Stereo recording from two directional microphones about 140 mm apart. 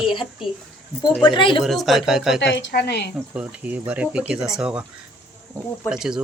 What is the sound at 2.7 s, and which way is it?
Speech, 90° left.